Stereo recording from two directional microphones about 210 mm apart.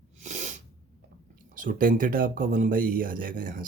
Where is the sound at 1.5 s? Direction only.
40° right (ahead or behind).